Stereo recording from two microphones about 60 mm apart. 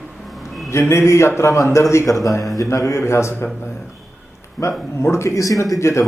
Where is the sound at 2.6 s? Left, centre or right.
Left.